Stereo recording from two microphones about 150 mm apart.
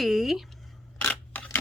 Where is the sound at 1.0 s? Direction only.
10° left (ahead or behind).